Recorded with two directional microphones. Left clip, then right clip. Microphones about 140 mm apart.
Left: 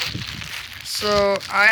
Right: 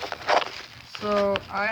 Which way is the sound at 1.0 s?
30° left (ahead or behind).